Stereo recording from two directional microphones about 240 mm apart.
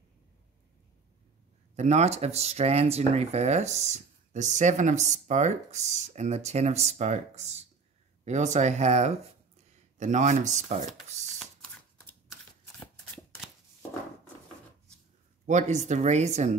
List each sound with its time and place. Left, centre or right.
1.8 s speech: right
11.3 s shuffling cards: centre
15.4 s speech: right